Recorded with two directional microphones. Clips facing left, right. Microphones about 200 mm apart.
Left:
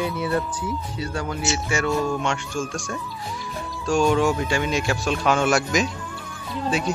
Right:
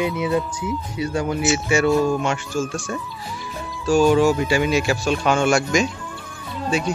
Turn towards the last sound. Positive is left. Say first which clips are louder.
# right 1 dB
turn(degrees=0)  # may be behind; listen again after turning